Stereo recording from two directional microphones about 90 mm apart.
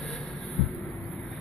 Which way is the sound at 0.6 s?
20° left (ahead or behind).